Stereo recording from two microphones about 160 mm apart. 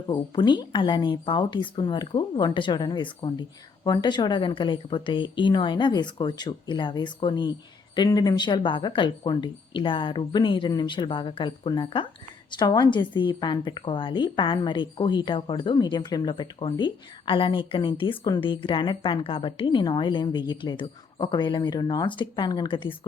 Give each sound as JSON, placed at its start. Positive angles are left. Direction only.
{"t": 0.1, "sound": "a woman's voice", "side_deg": 30}